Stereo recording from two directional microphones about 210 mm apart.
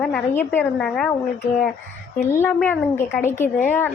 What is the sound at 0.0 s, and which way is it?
A woman's voice, 5° left (ahead or behind).